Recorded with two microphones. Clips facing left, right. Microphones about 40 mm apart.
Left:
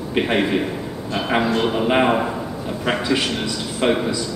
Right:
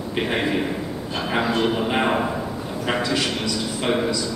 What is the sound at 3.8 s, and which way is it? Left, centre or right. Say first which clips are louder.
Speech: left 5 dB; left.